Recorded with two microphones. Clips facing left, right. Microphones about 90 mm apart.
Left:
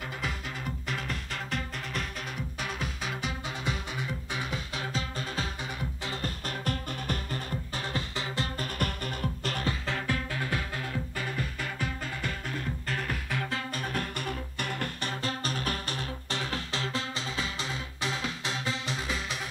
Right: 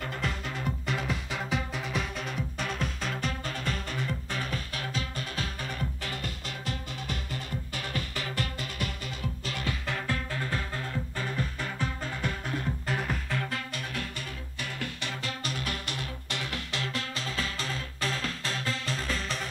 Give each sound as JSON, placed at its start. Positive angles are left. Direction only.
{"t": 0.8, "sound": "music", "side_deg": 0}
{"t": 4.7, "sound": "music", "side_deg": 30}
{"t": 6.2, "sound": "music", "side_deg": 50}
{"t": 7.9, "sound": "music", "side_deg": 25}
{"t": 8.5, "sound": "music", "side_deg": 50}
{"t": 10.0, "sound": "music", "side_deg": 15}
{"t": 10.8, "sound": "music", "side_deg": 0}
{"t": 13.7, "sound": "music", "side_deg": 50}